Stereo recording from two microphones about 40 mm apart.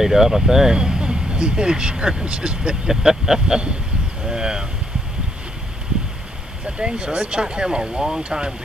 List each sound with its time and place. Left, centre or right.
0.0 s speech: centre
6.8 s speech: right